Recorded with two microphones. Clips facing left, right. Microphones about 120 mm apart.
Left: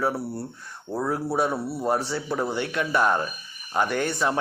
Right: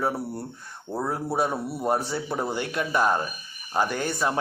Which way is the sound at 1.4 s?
15° right (ahead or behind).